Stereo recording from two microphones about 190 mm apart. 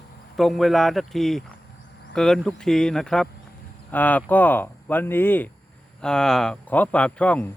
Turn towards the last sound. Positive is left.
turn(degrees=5)  # may be behind; listen again after turning